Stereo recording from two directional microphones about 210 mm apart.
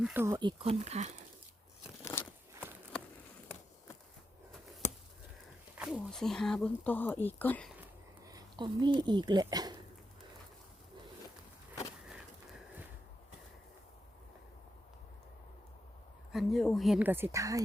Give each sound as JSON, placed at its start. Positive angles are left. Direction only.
{"t": 0.0, "sound": "speech", "side_deg": -10}
{"t": 5.7, "sound": "speech", "side_deg": -5}
{"t": 8.2, "sound": "speech", "side_deg": -15}
{"t": 16.3, "sound": "speech", "side_deg": 0}